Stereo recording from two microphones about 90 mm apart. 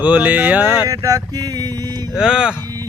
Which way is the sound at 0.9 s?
40° right (ahead or behind).